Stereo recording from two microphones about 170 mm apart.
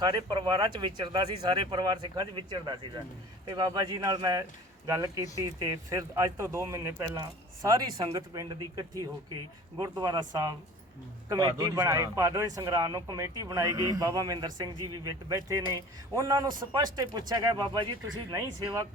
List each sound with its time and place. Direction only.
0.0 s a man's voice: 25° right (ahead or behind)